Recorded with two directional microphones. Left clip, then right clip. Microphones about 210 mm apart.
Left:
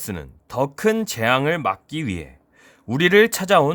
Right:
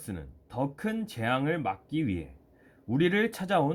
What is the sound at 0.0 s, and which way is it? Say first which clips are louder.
Speech: left 10 dB; 50° left (ahead or behind).